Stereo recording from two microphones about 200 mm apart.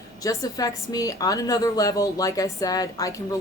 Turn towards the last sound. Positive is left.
turn(degrees=15)  # may be behind; listen again after turning